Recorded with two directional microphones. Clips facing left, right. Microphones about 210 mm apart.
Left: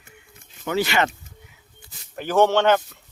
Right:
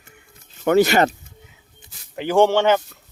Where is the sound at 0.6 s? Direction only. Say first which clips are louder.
Right 7 dB; 50° right (ahead or behind).